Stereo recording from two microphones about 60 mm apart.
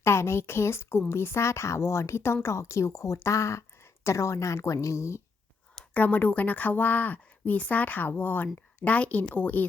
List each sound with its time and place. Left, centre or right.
0.0 s a woman's voice: left
5.9 s a woman's voice: left